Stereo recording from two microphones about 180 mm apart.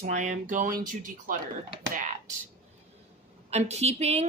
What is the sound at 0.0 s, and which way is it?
Speech, 40° right (ahead or behind).